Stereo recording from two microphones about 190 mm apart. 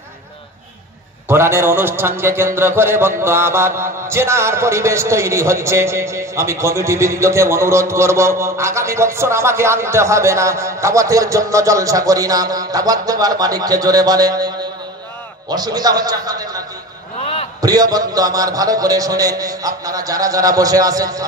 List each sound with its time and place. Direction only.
1.3 s a man's voice: 10° right (ahead or behind)
15.5 s a man's voice: 20° right (ahead or behind)